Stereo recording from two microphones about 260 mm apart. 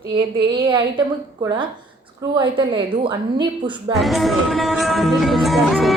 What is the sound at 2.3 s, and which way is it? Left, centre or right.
A woman's voice, centre.